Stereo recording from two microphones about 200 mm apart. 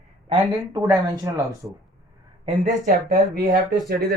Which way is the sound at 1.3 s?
15° right (ahead or behind).